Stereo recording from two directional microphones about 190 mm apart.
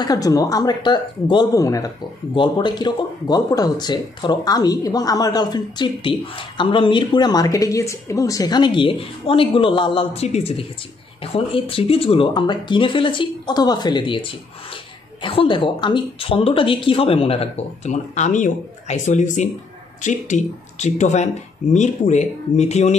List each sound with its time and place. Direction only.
0.0 s speech: 20° left (ahead or behind)
15.2 s speech: 25° left (ahead or behind)